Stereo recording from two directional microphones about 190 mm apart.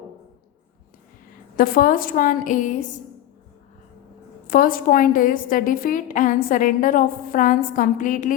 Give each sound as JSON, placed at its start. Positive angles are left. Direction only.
{"t": 1.5, "sound": "a woman's voice", "side_deg": 50}
{"t": 4.4, "sound": "a woman's voice", "side_deg": 45}